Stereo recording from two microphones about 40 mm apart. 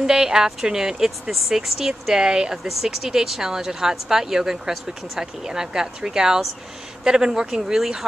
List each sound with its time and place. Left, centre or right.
0.0 s a woman's voice: centre